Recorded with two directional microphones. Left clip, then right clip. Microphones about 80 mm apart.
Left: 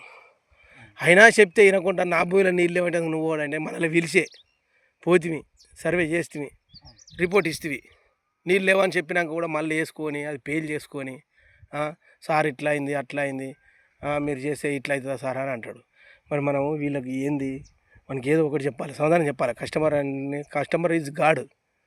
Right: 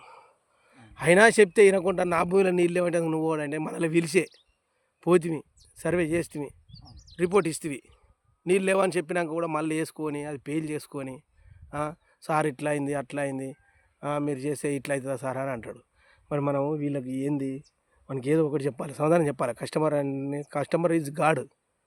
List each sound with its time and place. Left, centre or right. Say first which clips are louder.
0.0 s a sound: left 3 dB; right
0.6 s a sound: left 4 dB; right
1.5 s speech: left 2 dB; right
2.2 s a man's voice: left 2 dB; centre; by 3.2 s right
3.2 s a man's voice: left 2 dB; centre
4.9 s a sound: left 2 dB; centre
6.1 s a man's voice: left 2 dB; right
14.0 s a man's voice: left 3 dB; centre; by 15.6 s right
15.6 s a sound: left 3 dB; right
16.3 s speech: left 3 dB; centre
18.7 s a man's voice: left 2 dB; right
19.3 s a man's voice: left 3 dB; centre
20.1 s speech: left 2 dB; right
20.3 s a man's voice: left 3 dB; right